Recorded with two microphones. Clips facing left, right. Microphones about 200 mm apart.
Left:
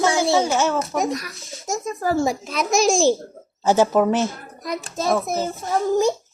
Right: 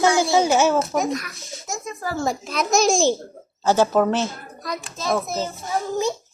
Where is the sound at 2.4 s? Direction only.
Centre (ahead or behind).